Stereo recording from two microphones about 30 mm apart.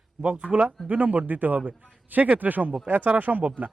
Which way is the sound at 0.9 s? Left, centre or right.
Right.